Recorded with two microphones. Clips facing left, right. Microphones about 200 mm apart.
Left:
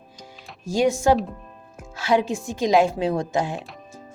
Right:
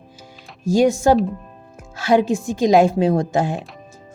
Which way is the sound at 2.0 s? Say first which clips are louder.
Right 5 dB; 45° right (ahead or behind).